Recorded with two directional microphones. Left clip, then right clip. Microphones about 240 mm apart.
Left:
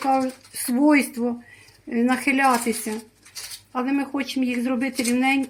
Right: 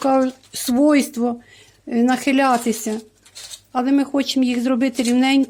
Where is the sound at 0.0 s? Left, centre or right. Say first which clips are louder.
Right 4 dB; right.